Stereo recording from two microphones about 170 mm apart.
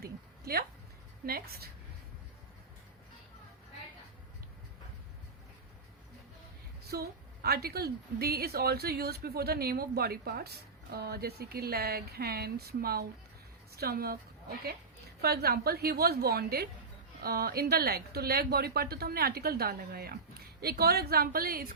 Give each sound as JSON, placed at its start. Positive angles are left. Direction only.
{"t": 0.0, "sound": "a woman's voice", "side_deg": -65}
{"t": 6.9, "sound": "a woman's voice", "side_deg": -70}
{"t": 15.2, "sound": "a woman's voice", "side_deg": -65}